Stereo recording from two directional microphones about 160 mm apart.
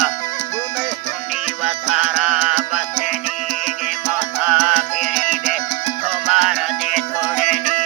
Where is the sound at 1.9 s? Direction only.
5° right (ahead or behind).